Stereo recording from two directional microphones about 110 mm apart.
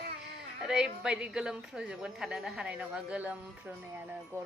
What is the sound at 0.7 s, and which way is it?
A woman's voice, 5° right (ahead or behind).